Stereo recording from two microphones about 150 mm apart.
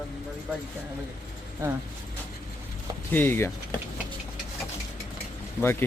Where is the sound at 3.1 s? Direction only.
15° left (ahead or behind).